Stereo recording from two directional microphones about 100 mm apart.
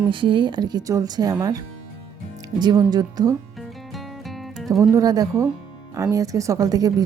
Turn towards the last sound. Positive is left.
turn(degrees=-40)  # may be behind; listen again after turning